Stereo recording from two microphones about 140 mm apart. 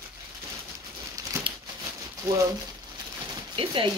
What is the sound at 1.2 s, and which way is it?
Crumpling, 25° right (ahead or behind).